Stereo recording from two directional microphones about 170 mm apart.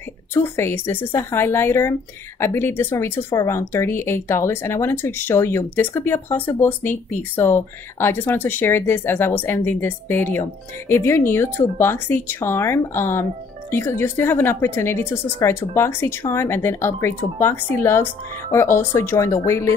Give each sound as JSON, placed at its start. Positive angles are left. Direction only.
{"t": 0.3, "sound": "speech", "side_deg": 15}